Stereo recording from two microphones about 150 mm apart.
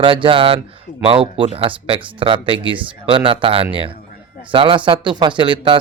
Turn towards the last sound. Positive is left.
turn(degrees=-35)  # may be behind; listen again after turning